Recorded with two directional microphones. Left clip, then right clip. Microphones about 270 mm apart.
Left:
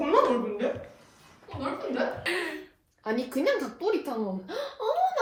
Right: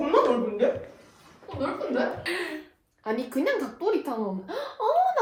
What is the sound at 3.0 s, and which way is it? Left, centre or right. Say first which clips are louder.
Speech: even; centre.